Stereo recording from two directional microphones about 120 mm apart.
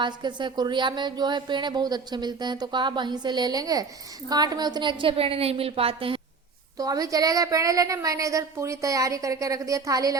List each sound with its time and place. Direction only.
0.0 s a woman's voice: 40° right (ahead or behind)
6.7 s a woman's voice: 30° right (ahead or behind)